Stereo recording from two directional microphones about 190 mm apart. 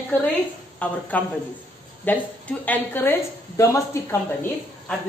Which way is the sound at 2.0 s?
10° left (ahead or behind).